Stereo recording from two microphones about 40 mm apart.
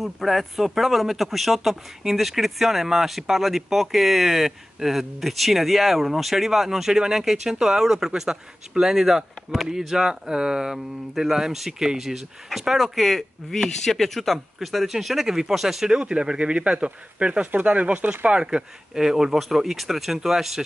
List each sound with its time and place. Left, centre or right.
0.0 s speech: centre
13.0 s speech: centre
16.0 s speech: right
17.5 s speech: right
18.3 s speech: right